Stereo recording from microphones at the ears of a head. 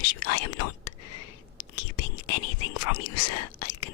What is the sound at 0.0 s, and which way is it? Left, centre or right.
Whispering, left.